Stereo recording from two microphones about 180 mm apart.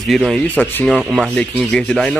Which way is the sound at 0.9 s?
Centre (ahead or behind).